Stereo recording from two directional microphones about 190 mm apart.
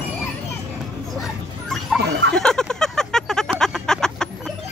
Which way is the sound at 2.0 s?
60° right (ahead or behind).